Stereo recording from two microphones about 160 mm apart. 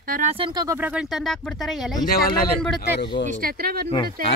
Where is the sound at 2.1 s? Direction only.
70° left (ahead or behind).